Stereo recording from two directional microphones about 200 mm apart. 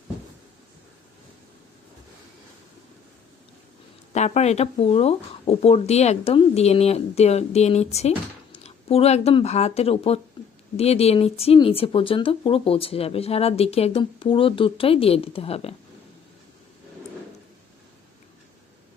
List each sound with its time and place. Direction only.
4.1 s speech: 35° left (ahead or behind)
10.4 s a sound: 25° left (ahead or behind)
10.8 s speech: 30° left (ahead or behind)